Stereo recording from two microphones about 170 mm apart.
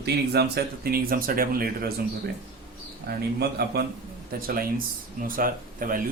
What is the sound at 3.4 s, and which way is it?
Speech, 70° right (ahead or behind).